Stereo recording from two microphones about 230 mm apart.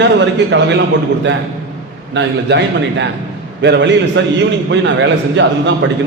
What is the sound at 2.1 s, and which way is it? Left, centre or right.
A man's voice, right.